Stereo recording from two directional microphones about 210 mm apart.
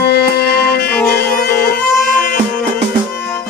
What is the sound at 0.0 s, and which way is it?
Music, 50° left (ahead or behind).